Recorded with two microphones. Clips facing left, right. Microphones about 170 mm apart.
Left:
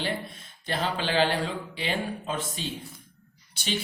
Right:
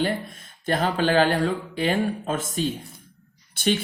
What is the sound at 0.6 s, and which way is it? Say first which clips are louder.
Speech: right 7 dB; 50° right (ahead or behind).